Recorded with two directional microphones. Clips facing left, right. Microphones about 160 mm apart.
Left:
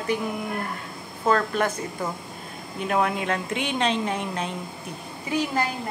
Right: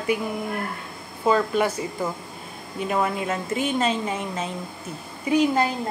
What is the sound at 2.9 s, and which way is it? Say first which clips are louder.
A woman's voice: left 1 dB; centre (ahead or behind).